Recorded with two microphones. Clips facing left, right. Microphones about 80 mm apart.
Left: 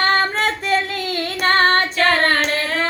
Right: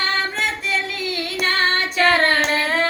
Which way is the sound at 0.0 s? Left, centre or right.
Left.